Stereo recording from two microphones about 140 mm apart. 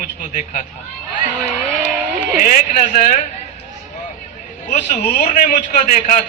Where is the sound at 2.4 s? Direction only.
65° left (ahead or behind).